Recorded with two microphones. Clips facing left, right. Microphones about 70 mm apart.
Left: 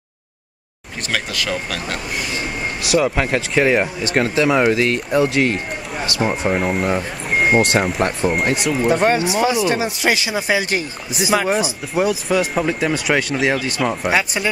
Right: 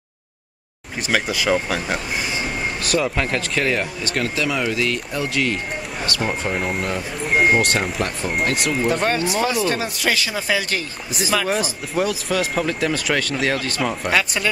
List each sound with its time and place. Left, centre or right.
1.0 s speech: centre
2.8 s speech: centre
6.6 s speech: centre
7.2 s a sound: centre
7.5 s speech: left
8.5 s speech: centre
9.0 s speech: centre
11.4 s speech: centre